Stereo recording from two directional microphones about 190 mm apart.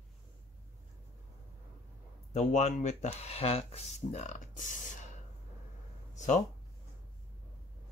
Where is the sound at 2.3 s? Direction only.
40° left (ahead or behind).